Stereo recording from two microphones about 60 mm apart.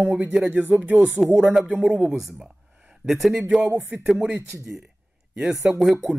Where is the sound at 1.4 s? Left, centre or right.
Centre.